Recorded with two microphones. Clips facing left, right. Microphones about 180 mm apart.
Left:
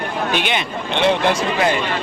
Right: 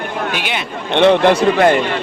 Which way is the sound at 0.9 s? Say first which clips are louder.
Right 6 dB; 60° right (ahead or behind).